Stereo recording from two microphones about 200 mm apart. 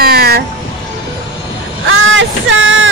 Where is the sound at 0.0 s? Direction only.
50° right (ahead or behind).